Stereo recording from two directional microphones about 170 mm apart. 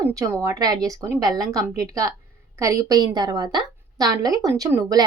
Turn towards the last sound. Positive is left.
turn(degrees=-20)  # may be behind; listen again after turning